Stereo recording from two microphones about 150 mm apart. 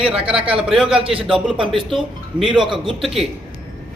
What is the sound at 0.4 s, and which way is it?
Speech, 5° right (ahead or behind).